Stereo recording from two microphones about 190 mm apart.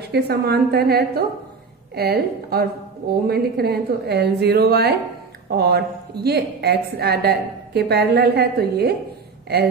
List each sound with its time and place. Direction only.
0.1 s a woman's voice: 55° right (ahead or behind)